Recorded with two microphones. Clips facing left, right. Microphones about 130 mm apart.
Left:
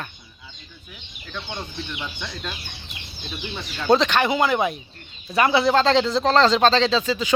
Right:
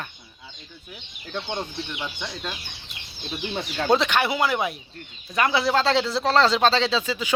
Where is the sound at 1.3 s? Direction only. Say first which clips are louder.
Right 3 dB; 25° right (ahead or behind).